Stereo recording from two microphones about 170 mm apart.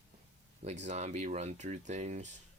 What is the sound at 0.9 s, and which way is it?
Speech, 40° right (ahead or behind).